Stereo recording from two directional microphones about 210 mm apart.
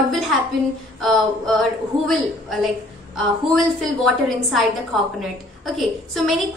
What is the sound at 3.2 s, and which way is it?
A woman's voice, centre (ahead or behind).